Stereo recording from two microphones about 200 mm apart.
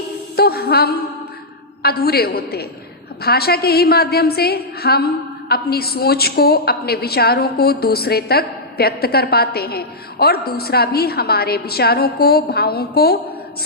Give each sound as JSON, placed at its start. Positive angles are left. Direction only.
{"t": 0.3, "sound": "music", "side_deg": 50}
{"t": 1.8, "sound": "a woman's voice", "side_deg": 50}